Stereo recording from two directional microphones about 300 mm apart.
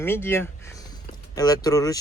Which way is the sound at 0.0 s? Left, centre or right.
Centre.